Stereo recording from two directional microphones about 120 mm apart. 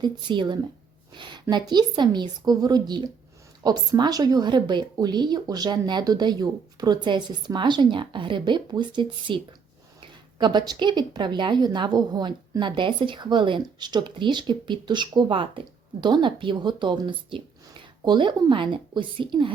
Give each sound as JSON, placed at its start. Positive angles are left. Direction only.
{"t": 0.0, "sound": "speech", "side_deg": -40}